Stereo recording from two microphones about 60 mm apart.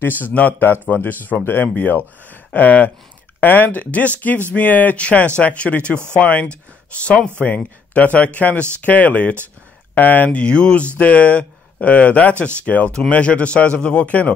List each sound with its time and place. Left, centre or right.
0.2 s speech: left